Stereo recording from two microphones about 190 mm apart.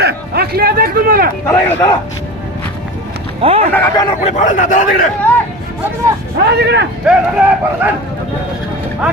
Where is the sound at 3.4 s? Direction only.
30° right (ahead or behind).